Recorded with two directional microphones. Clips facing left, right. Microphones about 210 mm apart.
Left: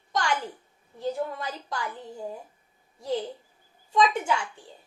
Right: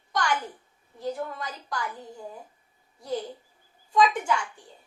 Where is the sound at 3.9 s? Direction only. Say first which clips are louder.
Right 1 dB; 25° left (ahead or behind).